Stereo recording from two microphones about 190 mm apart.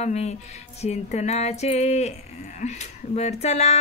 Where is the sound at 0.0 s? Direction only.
35° left (ahead or behind).